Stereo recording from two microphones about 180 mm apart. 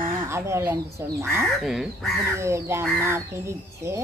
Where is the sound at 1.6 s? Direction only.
Centre (ahead or behind).